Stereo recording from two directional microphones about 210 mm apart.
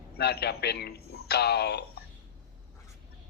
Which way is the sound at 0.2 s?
50° left (ahead or behind).